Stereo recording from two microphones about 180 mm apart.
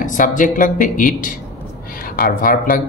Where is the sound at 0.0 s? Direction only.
45° left (ahead or behind).